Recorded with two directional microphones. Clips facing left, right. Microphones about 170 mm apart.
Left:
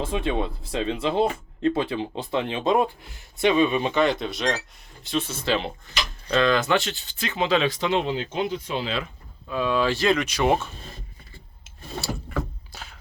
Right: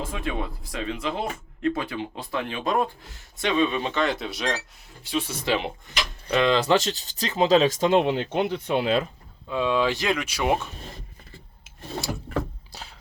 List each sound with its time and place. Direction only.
0.0 s speech: 25° left (ahead or behind)
3.4 s speech: 15° left (ahead or behind)
4.1 s speech: 5° right (ahead or behind); by 6.6 s 20° right (ahead or behind)
6.6 s speech: 35° right (ahead or behind); by 9.0 s 55° right (ahead or behind)
9.5 s speech: 20° right (ahead or behind)
12.3 s a sound: 35° right (ahead or behind)